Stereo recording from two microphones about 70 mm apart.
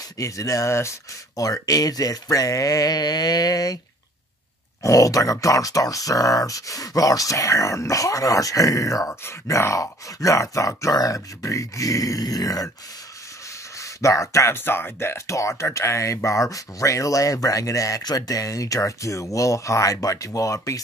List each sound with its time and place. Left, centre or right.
0.2 s speech: left
1.3 s speech: left
4.8 s speech: left
10.9 s speech: left
13.7 s speech: left
14.5 s speech: left